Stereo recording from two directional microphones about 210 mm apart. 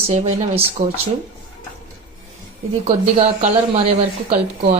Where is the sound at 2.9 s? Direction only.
30° right (ahead or behind).